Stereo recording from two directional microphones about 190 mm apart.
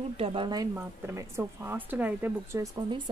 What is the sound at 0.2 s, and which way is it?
Speech, 25° right (ahead or behind).